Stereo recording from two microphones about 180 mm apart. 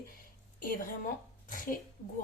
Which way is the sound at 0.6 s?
50° left (ahead or behind).